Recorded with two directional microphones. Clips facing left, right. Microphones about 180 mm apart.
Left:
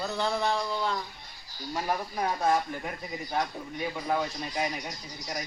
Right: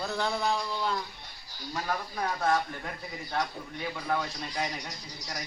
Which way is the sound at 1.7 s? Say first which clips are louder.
Left 2 dB; 20° left (ahead or behind).